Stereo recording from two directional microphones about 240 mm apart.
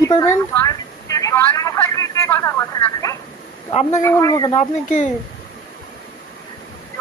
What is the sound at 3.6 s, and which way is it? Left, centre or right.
Speech, left.